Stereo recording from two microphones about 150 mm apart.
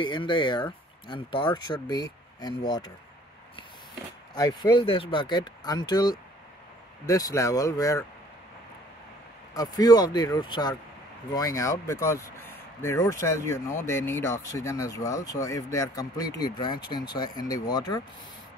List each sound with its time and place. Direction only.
0.0 s speech: 30° left (ahead or behind)
4.4 s speech: 25° left (ahead or behind)
9.5 s speech: 25° left (ahead or behind)